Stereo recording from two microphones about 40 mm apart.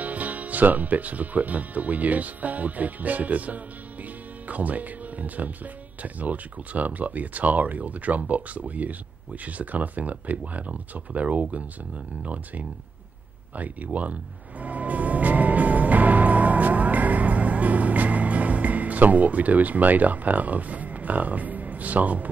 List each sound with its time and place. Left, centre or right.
0.0 s speech: right
13.9 s speech: right
14.6 s music: right